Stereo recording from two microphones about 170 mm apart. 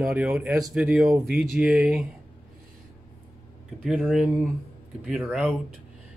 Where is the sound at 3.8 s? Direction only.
5° right (ahead or behind).